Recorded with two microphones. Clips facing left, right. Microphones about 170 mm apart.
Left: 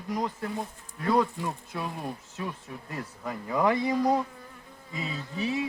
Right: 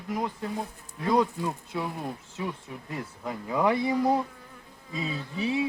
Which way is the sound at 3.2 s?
15° right (ahead or behind).